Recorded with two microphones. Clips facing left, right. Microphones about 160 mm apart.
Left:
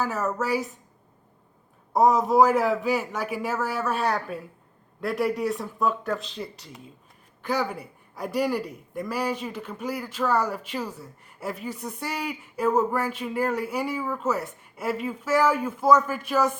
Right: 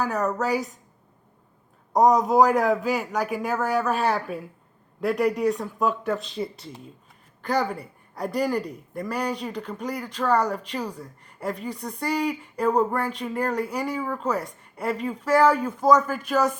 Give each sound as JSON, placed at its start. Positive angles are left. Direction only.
{"t": 0.0, "sound": "a woman's voice", "side_deg": 0}
{"t": 2.0, "sound": "a woman's voice", "side_deg": 0}